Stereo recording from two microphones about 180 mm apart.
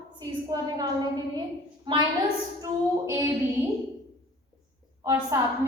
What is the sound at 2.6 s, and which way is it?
Female singing, 15° right (ahead or behind).